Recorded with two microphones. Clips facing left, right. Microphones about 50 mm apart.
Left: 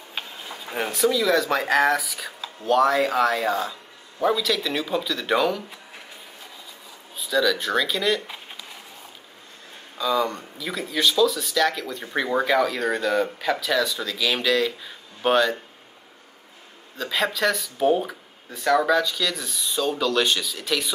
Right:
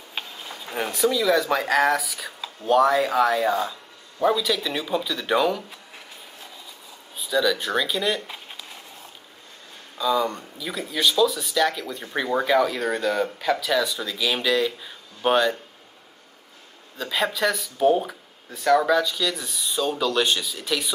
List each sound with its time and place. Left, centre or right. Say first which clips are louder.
0.7 s speech: left 1 dB; centre
1.2 s speech: even; centre
2.6 s speech: right 1 dB; centre
7.2 s speech: even; centre
9.9 s speech: even; centre
12.1 s speech: left 1 dB; centre
12.4 s speech: even; centre
17.0 s speech: even; centre